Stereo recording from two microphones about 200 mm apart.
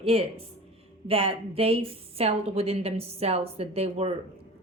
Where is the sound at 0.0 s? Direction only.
30° right (ahead or behind).